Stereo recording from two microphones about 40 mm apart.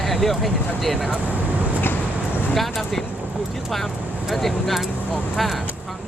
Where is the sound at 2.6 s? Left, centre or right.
Centre.